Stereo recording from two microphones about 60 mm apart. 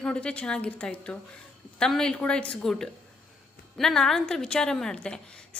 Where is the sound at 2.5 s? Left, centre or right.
Centre.